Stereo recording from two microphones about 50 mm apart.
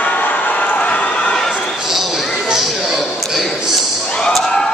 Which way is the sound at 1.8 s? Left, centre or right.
Centre.